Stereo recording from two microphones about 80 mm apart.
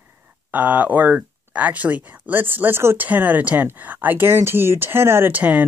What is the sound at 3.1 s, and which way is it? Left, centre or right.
Speech, right.